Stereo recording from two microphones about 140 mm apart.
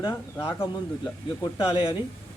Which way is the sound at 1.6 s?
40° left (ahead or behind).